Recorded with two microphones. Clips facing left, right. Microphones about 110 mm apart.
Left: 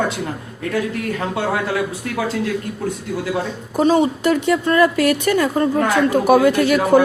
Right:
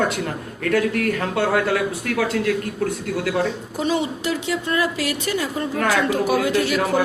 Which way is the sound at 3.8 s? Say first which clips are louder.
Left 8 dB; 45° left (ahead or behind).